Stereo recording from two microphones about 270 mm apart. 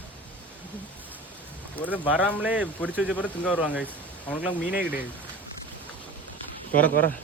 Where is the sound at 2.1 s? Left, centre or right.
Centre.